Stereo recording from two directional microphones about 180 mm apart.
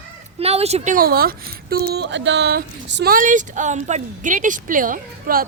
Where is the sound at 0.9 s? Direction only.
55° right (ahead or behind).